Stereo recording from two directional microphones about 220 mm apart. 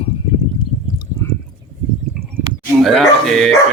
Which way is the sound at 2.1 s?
Centre (ahead or behind).